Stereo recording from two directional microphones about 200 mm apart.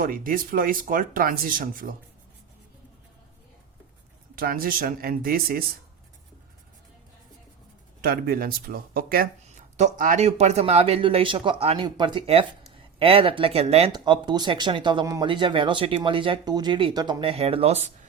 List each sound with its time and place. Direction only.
0.0 s speech: 45° right (ahead or behind)
4.4 s speech: 45° right (ahead or behind)
8.0 s speech: 50° right (ahead or behind); by 17.9 s 30° right (ahead or behind)